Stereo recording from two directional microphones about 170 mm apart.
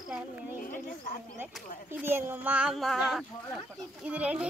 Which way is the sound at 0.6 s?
50° left (ahead or behind).